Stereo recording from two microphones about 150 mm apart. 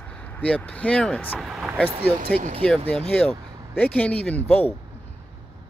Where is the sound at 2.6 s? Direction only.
5° left (ahead or behind).